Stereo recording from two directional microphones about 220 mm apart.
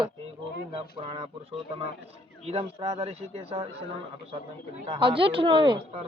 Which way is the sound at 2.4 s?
30° right (ahead or behind).